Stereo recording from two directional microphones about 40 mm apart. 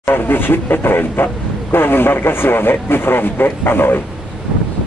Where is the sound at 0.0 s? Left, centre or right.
Left.